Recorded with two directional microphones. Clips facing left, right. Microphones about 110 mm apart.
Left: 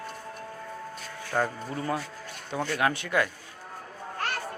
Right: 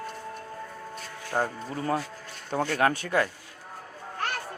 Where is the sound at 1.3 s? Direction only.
35° right (ahead or behind).